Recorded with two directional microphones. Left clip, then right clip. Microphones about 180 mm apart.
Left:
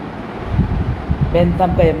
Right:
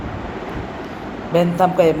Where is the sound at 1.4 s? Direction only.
40° right (ahead or behind).